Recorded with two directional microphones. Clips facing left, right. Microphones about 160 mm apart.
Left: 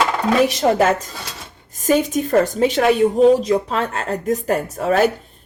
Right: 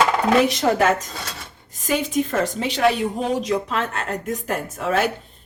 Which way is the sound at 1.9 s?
45° left (ahead or behind).